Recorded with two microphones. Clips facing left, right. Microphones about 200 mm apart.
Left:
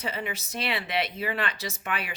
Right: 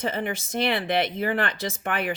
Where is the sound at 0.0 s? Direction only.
50° right (ahead or behind).